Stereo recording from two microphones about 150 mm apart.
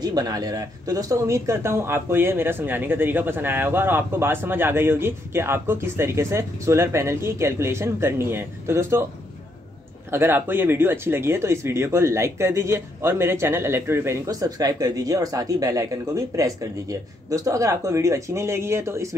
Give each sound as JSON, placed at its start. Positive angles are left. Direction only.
{"t": 0.0, "sound": "speech", "side_deg": -25}
{"t": 10.1, "sound": "speech", "side_deg": -15}